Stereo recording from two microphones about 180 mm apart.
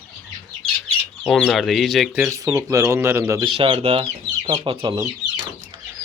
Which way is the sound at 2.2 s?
15° right (ahead or behind).